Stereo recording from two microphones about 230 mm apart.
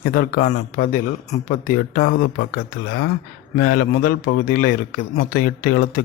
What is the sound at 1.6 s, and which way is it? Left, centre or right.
Speech, left.